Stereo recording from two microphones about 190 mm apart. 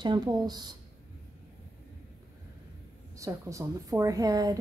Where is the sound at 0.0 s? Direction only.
20° right (ahead or behind).